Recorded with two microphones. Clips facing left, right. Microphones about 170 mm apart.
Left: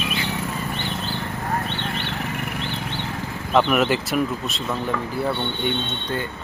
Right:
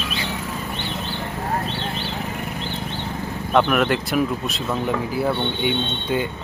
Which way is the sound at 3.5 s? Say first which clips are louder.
Even; centre (ahead or behind).